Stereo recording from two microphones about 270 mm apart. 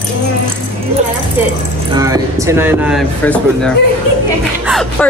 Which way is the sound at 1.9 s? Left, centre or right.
Centre.